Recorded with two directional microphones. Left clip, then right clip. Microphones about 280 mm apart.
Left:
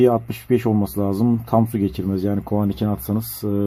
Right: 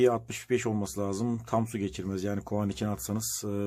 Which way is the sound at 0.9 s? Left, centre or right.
Right.